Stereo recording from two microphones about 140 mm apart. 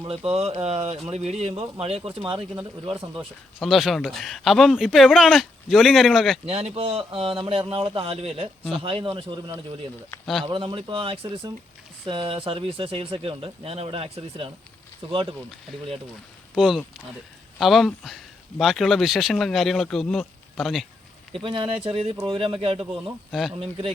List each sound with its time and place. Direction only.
0.0 s speech: 45° right (ahead or behind)
3.6 s speech: centre (ahead or behind)
6.4 s speech: 50° right (ahead or behind)
10.4 s speech: 35° right (ahead or behind)
16.6 s speech: 5° right (ahead or behind)
21.3 s speech: 35° right (ahead or behind)
23.3 s speech: centre (ahead or behind)
23.6 s speech: 40° right (ahead or behind)